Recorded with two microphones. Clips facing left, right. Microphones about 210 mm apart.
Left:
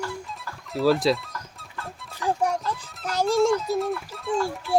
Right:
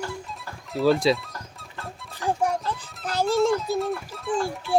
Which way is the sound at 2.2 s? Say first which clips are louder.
Even; 30° right (ahead or behind).